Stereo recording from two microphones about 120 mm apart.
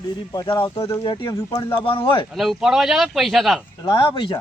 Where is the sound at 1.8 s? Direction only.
45° left (ahead or behind).